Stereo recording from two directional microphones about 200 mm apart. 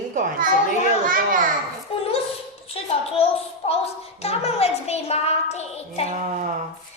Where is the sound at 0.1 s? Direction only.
40° right (ahead or behind).